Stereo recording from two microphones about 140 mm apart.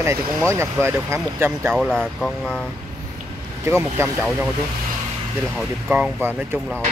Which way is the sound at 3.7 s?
20° right (ahead or behind).